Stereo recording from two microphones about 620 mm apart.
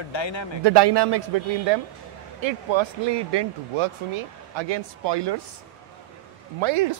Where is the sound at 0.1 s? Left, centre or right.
Left.